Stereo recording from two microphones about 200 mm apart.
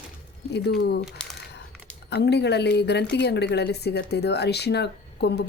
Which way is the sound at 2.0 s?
55° left (ahead or behind).